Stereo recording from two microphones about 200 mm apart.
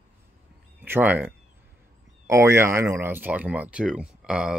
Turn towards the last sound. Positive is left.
turn(degrees=-5)  # may be behind; listen again after turning